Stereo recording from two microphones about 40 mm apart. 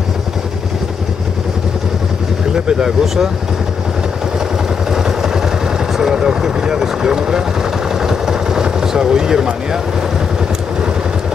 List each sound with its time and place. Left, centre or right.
2.5 s speech: centre
4.9 s vehicle: centre
5.9 s speech: centre
8.0 s vehicle: centre